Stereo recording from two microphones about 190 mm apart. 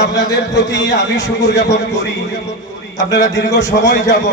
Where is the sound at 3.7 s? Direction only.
55° left (ahead or behind).